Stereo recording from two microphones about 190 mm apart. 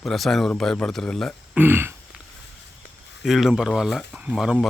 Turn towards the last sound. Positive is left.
turn(degrees=0)  # may be behind; listen again after turning